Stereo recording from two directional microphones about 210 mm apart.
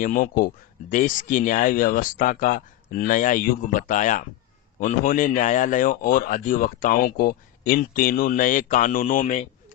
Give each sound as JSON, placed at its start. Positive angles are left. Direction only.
{"t": 0.0, "sound": "speech", "side_deg": 40}